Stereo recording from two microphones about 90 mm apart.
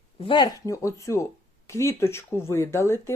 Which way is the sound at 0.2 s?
65° left (ahead or behind).